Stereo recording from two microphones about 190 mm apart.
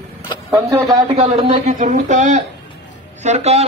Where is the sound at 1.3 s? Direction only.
35° right (ahead or behind).